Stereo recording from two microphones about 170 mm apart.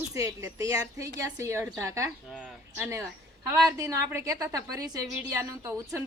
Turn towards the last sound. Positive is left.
turn(degrees=-15)  # may be behind; listen again after turning